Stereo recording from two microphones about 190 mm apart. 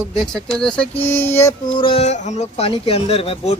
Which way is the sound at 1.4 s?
25° left (ahead or behind).